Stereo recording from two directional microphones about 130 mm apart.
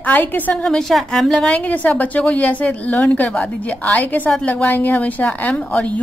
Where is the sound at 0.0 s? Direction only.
15° left (ahead or behind).